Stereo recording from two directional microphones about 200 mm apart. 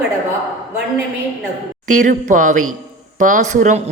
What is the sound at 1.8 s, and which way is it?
A woman's voice, 40° right (ahead or behind).